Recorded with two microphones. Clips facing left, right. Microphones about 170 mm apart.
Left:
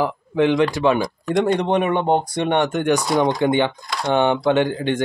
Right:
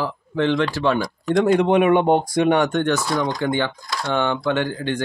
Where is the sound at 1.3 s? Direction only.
5° right (ahead or behind).